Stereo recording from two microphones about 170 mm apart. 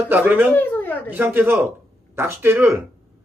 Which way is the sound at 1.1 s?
10° right (ahead or behind).